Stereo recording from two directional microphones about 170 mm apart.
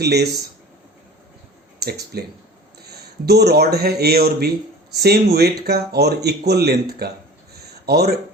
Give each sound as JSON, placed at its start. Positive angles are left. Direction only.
{"t": 0.0, "sound": "speech", "side_deg": -75}
{"t": 1.8, "sound": "speech", "side_deg": -70}
{"t": 7.5, "sound": "a sound", "side_deg": -70}